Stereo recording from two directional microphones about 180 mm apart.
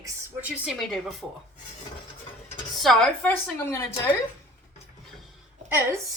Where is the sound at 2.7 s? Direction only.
Centre (ahead or behind).